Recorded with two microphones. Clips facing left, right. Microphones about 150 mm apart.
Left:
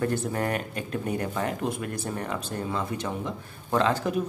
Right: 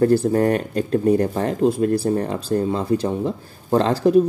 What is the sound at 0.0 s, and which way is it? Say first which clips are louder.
Speech: right 11 dB; 35° right (ahead or behind).